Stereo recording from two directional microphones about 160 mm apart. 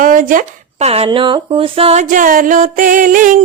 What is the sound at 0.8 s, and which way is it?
Music, 40° right (ahead or behind).